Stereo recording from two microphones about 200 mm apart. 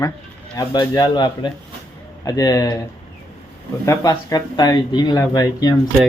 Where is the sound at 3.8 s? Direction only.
20° left (ahead or behind).